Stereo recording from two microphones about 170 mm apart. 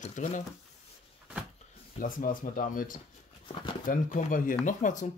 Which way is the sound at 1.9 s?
55° left (ahead or behind).